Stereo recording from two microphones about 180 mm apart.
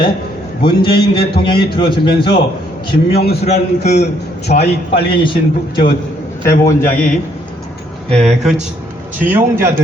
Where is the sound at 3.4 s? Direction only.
40° left (ahead or behind).